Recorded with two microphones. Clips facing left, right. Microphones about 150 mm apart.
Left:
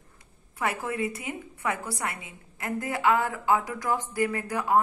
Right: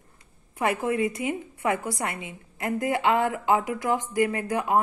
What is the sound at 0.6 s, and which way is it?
A woman's voice, 20° right (ahead or behind).